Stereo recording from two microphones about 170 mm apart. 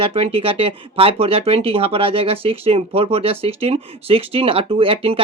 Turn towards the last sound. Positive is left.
turn(degrees=-35)  # may be behind; listen again after turning